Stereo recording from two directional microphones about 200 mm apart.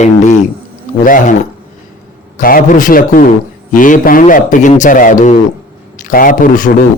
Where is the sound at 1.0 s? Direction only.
40° left (ahead or behind).